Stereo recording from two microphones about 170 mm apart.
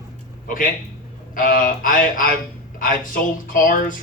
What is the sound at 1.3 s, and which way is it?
Speech, 55° left (ahead or behind).